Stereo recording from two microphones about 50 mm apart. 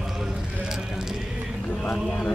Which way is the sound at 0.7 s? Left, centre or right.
Centre.